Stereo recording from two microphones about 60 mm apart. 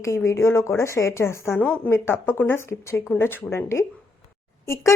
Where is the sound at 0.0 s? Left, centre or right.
Left.